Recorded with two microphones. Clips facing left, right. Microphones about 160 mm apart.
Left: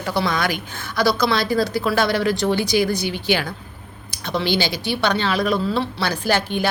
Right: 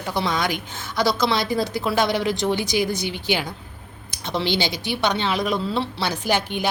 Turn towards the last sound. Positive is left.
turn(degrees=-15)  # may be behind; listen again after turning